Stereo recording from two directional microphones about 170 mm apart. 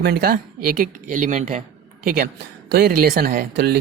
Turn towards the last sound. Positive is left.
turn(degrees=-70)  # may be behind; listen again after turning